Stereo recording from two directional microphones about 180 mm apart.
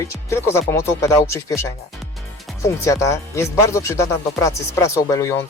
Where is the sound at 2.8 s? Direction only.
15° left (ahead or behind).